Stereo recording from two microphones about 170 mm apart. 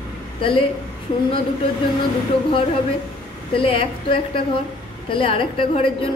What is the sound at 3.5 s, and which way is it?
A woman's voice, 30° left (ahead or behind).